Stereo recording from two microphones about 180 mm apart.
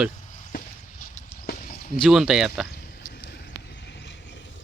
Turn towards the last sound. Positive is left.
turn(degrees=75)  # may be behind; listen again after turning